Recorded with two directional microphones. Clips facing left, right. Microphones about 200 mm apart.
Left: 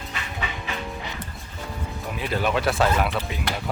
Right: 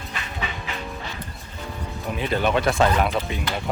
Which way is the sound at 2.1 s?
5° left (ahead or behind).